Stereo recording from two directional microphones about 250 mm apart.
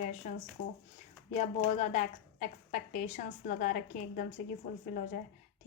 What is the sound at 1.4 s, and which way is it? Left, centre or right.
A woman's voice, left.